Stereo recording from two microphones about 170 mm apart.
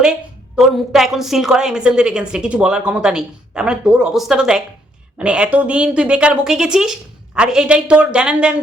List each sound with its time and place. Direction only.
0.5 s a woman's voice: centre (ahead or behind)